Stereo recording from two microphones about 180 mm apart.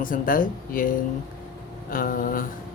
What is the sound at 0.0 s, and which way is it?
Speech, 50° left (ahead or behind).